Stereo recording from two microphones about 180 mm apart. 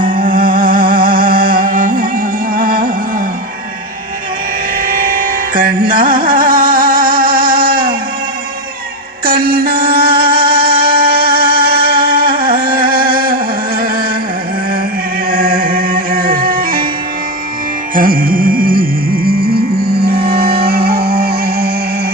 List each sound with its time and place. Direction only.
0.0 s music: 50° right (ahead or behind)
4.9 s carnatic music: 50° right (ahead or behind)
9.2 s music: 55° right (ahead or behind)
15.3 s music: 50° right (ahead or behind)
17.9 s music: 50° right (ahead or behind)
20.9 s music: 30° right (ahead or behind)
21.2 s music: 55° right (ahead or behind)